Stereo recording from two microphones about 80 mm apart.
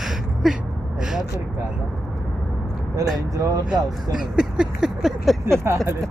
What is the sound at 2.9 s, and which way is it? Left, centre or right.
Speech, right.